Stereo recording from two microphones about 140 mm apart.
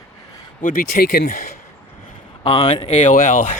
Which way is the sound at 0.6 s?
85° left.